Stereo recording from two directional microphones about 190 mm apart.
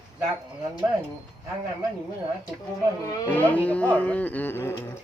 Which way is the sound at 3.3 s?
10° left (ahead or behind).